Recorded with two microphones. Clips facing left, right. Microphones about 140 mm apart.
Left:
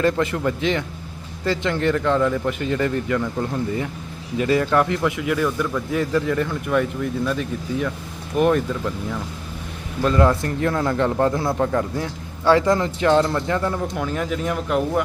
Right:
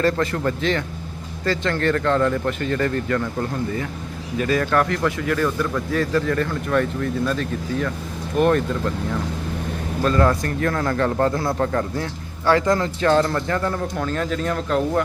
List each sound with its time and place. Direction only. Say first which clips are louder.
0.0 s a man's voice: even; 15° left (ahead or behind)
4.4 s a man's voice: left 1 dB; 20° left (ahead or behind)
10.0 s a man's voice: left 1 dB; 15° left (ahead or behind)
10.7 s a man's voice: left 1 dB; 5° left (ahead or behind)
10.9 s speech: left 1 dB; 15° left (ahead or behind)
11.4 s a man's voice: left 1 dB; 5° left (ahead or behind)